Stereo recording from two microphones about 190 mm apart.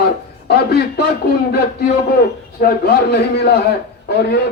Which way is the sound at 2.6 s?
55° left (ahead or behind).